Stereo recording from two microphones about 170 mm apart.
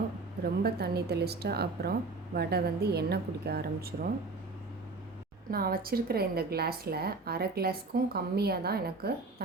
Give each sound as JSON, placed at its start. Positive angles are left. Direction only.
{"t": 0.4, "sound": "speech", "side_deg": -70}
{"t": 5.5, "sound": "speech", "side_deg": -60}